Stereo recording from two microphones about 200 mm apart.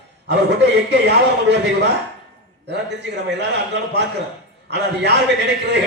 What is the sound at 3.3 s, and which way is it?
A man's voice, 60° right (ahead or behind).